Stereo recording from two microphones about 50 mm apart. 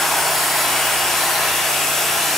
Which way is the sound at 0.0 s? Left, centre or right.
Centre.